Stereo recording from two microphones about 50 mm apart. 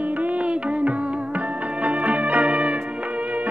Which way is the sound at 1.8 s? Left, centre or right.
Right.